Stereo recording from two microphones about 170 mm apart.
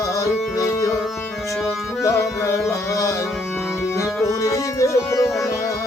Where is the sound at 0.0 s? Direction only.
20° left (ahead or behind).